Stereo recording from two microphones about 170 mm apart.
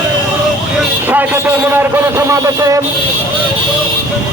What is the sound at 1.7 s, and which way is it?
A man's voice, 15° right (ahead or behind).